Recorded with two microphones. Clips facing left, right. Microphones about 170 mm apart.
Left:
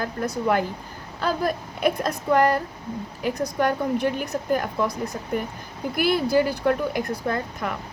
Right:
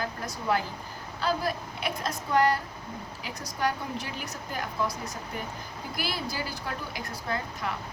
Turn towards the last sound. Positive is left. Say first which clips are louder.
# left 6 dB
turn(degrees=55)  # may be behind; listen again after turning